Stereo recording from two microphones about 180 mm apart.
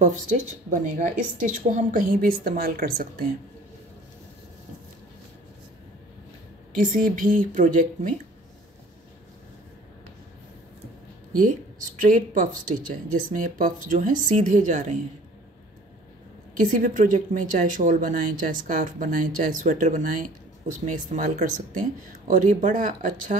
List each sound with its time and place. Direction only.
0.0 s speech: 45° right (ahead or behind)
6.7 s speech: 50° right (ahead or behind)
11.3 s speech: 50° right (ahead or behind)
16.5 s speech: 45° right (ahead or behind)